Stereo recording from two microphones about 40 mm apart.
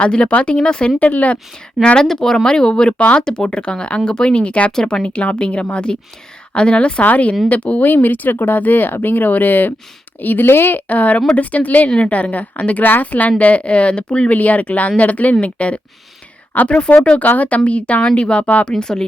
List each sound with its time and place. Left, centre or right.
0.0 s speech: left
0.9 s speech: left
1.8 s speech: left
2.0 s speech: centre; by 4.7 s left
4.7 s speech: centre
5.0 s speech: left
7.0 s speech: left
7.9 s speech: left
10.8 s speech: left
14.3 s speech: left
17.2 s speech: left
18.7 s speech: centre